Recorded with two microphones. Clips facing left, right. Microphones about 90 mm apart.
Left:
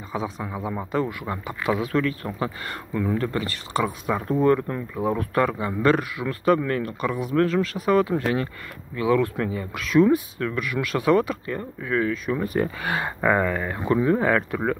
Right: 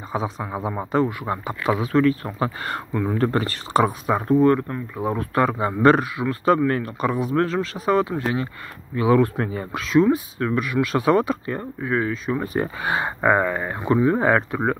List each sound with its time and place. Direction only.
0.1 s speech: 30° right (ahead or behind)
4.3 s speech: 5° left (ahead or behind)
5.4 s speech: 30° right (ahead or behind)
8.1 s speech: 15° right (ahead or behind)
8.9 s speech: 25° right (ahead or behind)